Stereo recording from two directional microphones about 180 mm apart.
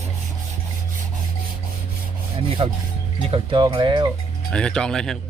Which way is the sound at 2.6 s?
30° right (ahead or behind).